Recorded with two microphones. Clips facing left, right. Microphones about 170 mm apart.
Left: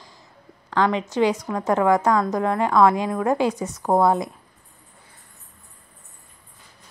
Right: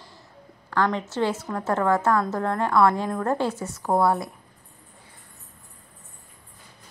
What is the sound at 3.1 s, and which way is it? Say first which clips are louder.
Music: left 4 dB; 10° left (ahead or behind).